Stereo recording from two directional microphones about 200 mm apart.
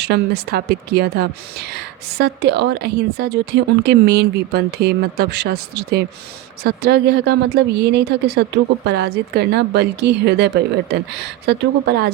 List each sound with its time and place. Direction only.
0.0 s speech: 55° right (ahead or behind)